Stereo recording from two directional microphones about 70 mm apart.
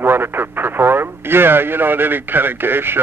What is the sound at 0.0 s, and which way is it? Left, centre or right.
Speech, right.